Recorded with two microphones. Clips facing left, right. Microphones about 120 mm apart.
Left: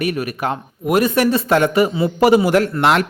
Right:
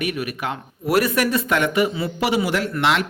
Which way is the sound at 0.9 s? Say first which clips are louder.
Left 4 dB; 25° left (ahead or behind).